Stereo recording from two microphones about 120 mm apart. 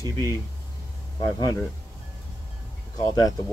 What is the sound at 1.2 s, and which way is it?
Speech, 30° left (ahead or behind).